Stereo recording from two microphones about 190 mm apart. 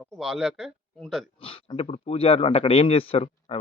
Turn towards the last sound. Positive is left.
turn(degrees=30)  # may be behind; listen again after turning